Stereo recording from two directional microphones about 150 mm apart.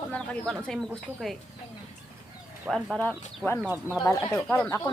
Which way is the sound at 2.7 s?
5° left (ahead or behind).